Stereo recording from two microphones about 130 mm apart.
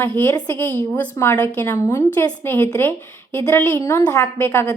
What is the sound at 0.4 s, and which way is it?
A woman's voice, 20° left (ahead or behind).